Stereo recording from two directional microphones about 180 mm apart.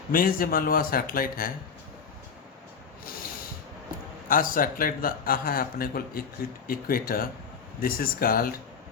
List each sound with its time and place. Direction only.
0.1 s a man's voice: 50° left (ahead or behind)
4.3 s a man's voice: 50° left (ahead or behind)